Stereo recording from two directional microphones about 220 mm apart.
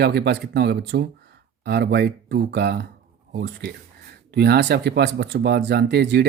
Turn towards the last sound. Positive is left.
turn(degrees=-50)  # may be behind; listen again after turning